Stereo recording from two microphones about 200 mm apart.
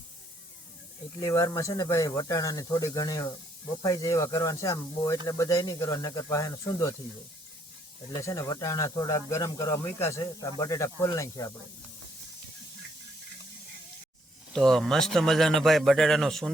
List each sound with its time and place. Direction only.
1.2 s speech: 15° left (ahead or behind)
8.1 s speech: 15° left (ahead or behind)
14.5 s a man's voice: centre (ahead or behind)